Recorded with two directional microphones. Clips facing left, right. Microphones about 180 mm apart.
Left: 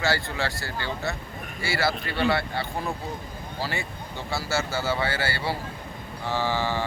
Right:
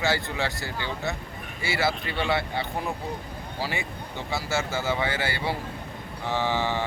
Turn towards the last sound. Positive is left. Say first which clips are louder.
# even
turn(degrees=-20)  # may be behind; listen again after turning